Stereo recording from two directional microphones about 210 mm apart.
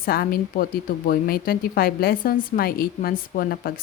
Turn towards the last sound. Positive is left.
turn(degrees=45)  # may be behind; listen again after turning